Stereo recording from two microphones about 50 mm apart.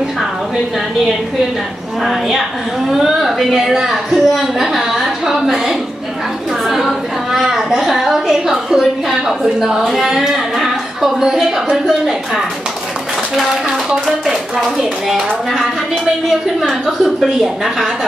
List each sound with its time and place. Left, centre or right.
3.1 s speech: centre
6.7 s a sound: centre
13.8 s a woman's voice: centre
16.8 s speech: centre